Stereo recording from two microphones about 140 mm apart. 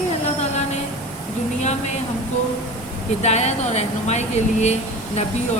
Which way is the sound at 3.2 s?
50° left (ahead or behind).